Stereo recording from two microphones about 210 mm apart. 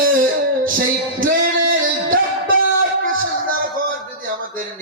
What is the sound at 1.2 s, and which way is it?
Music, 40° right (ahead or behind).